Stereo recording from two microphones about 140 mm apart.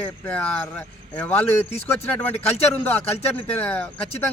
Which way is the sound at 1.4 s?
45° left (ahead or behind).